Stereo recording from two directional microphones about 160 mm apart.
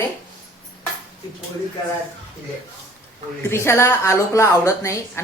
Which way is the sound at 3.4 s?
15° left (ahead or behind).